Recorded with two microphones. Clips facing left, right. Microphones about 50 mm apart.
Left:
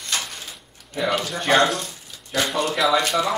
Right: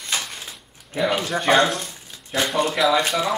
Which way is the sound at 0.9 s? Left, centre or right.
Right.